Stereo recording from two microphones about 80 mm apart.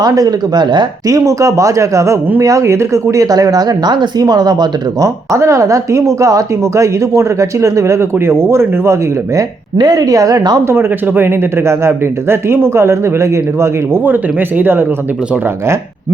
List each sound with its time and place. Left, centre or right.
0.0 s speech: right
1.0 s speech: right
9.7 s speech: right
10.7 s speech: right